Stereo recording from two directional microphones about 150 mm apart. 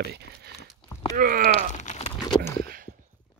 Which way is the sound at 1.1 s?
70° right (ahead or behind).